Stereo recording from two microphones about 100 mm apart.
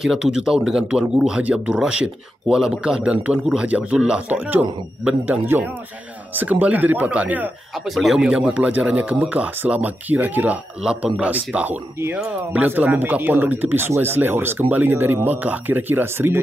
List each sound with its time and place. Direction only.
0.0 s speech: 5° right (ahead or behind)
7.7 s speech: centre (ahead or behind); by 16.3 s 20° right (ahead or behind)